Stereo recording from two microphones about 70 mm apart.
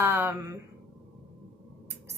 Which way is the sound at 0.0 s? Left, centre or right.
Right.